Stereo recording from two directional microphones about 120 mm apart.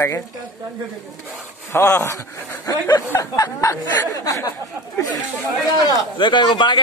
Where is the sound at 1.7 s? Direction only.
20° left (ahead or behind).